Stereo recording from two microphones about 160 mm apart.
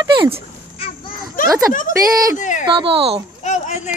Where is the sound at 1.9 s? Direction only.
55° left (ahead or behind).